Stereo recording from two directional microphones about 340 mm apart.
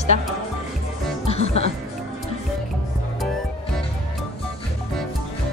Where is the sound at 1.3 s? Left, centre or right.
Centre.